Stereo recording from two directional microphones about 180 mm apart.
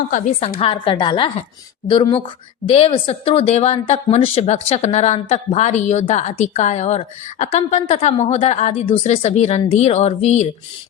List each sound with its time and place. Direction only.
0.1 s a woman's voice: 35° left (ahead or behind)